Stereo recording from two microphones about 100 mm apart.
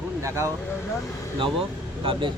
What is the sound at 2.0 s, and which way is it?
Speech, 60° right (ahead or behind).